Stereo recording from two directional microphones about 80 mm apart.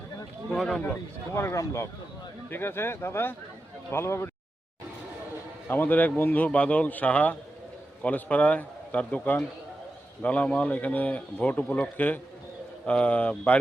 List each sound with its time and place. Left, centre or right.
0.5 s speech: centre
1.3 s speech: left
5.6 s a man's voice: left